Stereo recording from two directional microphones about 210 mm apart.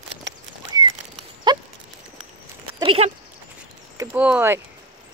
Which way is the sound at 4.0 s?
10° right (ahead or behind).